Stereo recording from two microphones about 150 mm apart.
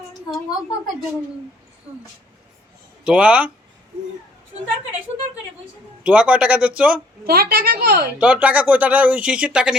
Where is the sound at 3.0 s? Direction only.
10° right (ahead or behind).